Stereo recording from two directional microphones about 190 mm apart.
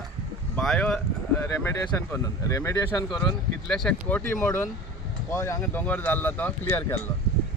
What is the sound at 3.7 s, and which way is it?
Speech, 5° left (ahead or behind).